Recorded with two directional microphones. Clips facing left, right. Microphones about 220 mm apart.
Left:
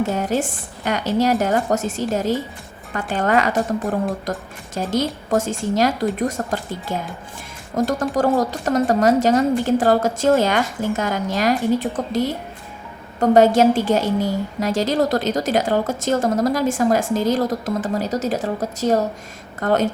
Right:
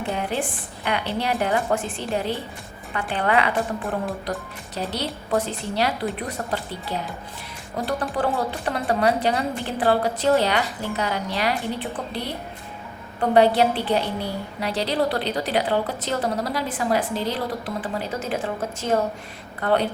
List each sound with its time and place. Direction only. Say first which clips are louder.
0.0 s a woman's voice: left 6 dB; 45° left (ahead or behind)